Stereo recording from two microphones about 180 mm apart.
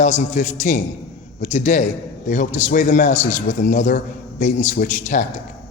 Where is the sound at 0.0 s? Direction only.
40° left (ahead or behind).